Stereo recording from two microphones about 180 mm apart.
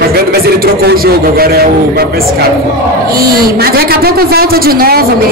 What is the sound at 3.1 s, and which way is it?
A man's voice, 55° right (ahead or behind).